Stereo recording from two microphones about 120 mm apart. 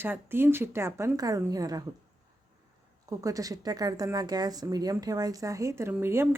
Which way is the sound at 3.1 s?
30° right (ahead or behind).